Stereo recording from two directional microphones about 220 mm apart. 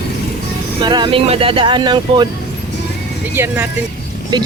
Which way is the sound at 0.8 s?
20° right (ahead or behind).